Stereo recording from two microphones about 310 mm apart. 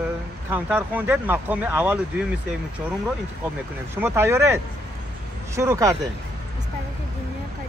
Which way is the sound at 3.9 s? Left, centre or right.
Centre.